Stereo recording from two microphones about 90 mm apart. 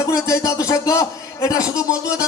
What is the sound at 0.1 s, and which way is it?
Speech, 40° left (ahead or behind).